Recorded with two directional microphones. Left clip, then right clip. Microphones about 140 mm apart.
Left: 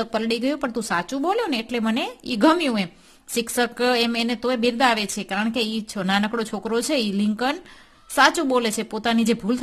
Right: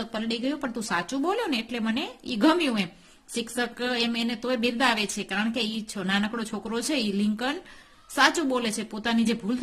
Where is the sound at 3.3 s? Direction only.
45° left (ahead or behind).